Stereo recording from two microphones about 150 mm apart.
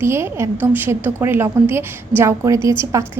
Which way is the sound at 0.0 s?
15° right (ahead or behind).